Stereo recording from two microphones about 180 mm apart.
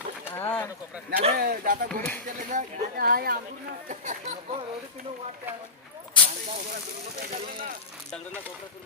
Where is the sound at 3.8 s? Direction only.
45° right (ahead or behind).